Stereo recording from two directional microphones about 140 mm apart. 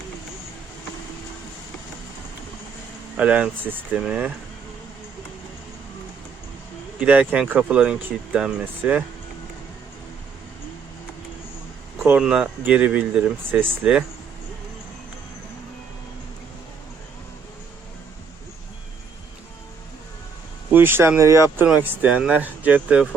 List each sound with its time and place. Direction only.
3.2 s speech: 10° right (ahead or behind)
7.0 s speech: 10° right (ahead or behind)
12.2 s speech: 5° right (ahead or behind)
20.7 s speech: 15° right (ahead or behind)